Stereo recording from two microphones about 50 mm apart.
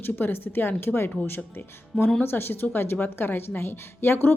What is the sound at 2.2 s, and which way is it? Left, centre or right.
A woman's voice, left.